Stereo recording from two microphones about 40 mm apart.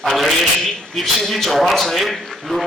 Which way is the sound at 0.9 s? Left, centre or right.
Centre.